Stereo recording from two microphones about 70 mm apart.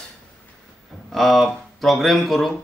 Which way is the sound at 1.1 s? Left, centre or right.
Centre.